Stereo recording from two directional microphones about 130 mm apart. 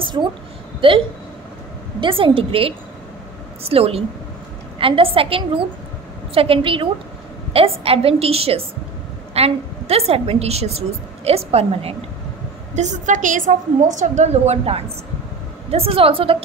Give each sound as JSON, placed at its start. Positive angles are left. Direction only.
{"t": 0.0, "sound": "a sound", "side_deg": -35}
{"t": 0.7, "sound": "a woman's voice", "side_deg": -40}
{"t": 12.7, "sound": "a woman's voice", "side_deg": -65}